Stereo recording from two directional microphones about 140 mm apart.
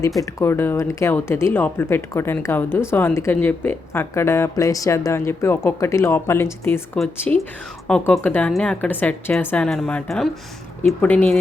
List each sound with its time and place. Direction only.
0.2 s a woman's voice: 20° left (ahead or behind)